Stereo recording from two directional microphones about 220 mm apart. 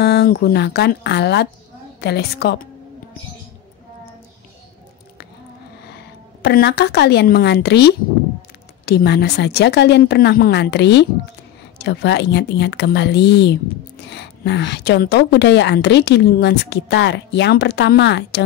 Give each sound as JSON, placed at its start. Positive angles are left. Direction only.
{"t": 0.0, "sound": "a woman's voice", "side_deg": 45}
{"t": 5.9, "sound": "a woman's voice", "side_deg": 50}